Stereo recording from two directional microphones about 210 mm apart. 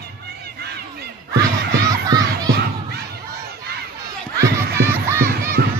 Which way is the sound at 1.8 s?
20° right (ahead or behind).